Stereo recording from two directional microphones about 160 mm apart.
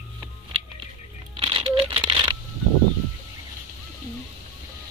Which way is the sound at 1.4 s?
35° right (ahead or behind).